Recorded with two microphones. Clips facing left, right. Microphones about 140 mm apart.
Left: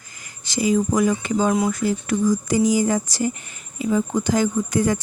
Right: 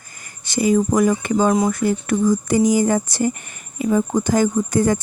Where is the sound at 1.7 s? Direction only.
60° right (ahead or behind).